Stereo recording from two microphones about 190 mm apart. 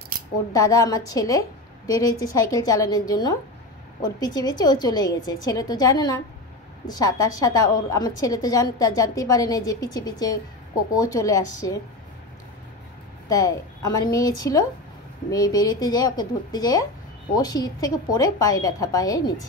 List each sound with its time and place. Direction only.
0.5 s a woman's voice: 15° left (ahead or behind)
13.3 s a woman's voice: 20° left (ahead or behind)